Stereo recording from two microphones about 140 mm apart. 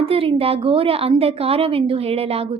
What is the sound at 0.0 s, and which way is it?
A woman's voice, 40° right (ahead or behind).